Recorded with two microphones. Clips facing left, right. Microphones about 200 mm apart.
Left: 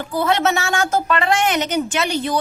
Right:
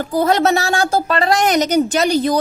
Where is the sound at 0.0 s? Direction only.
40° right (ahead or behind).